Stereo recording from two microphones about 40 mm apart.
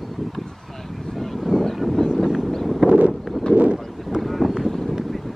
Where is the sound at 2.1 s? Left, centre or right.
Centre.